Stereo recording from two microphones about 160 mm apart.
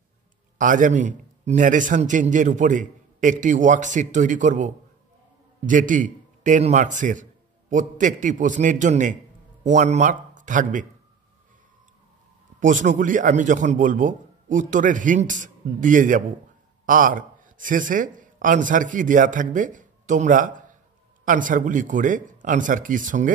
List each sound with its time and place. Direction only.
0.6 s a man's voice: 55° right (ahead or behind)
12.5 s a man's voice: 50° right (ahead or behind)